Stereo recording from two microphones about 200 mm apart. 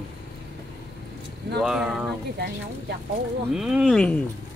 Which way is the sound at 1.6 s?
Centre (ahead or behind).